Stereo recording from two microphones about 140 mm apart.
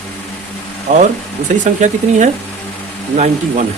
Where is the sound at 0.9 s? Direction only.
60° right (ahead or behind).